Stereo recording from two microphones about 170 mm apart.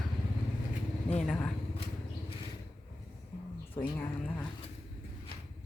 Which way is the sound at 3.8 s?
10° left (ahead or behind).